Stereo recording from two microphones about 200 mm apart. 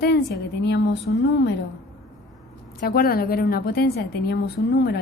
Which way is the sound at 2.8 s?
45° left (ahead or behind).